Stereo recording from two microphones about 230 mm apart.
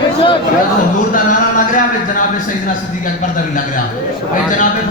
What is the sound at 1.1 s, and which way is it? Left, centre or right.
A man's voice, left.